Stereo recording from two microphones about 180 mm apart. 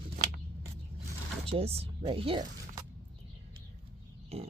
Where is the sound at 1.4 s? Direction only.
35° right (ahead or behind).